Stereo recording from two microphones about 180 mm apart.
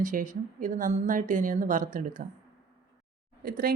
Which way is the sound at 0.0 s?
45° right (ahead or behind).